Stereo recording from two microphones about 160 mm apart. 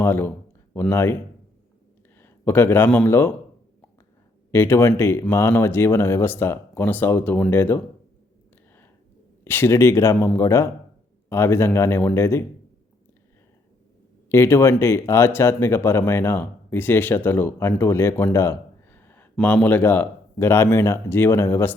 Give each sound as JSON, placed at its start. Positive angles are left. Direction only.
{"t": 0.0, "sound": "speech", "side_deg": 15}
{"t": 4.5, "sound": "speech", "side_deg": 15}
{"t": 9.4, "sound": "speech", "side_deg": 15}
{"t": 14.3, "sound": "speech", "side_deg": 15}